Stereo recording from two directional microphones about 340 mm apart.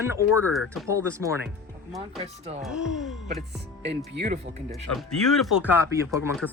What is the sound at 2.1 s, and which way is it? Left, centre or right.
Speech, centre.